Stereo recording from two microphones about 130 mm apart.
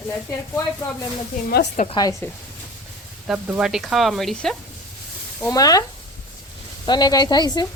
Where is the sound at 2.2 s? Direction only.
15° left (ahead or behind).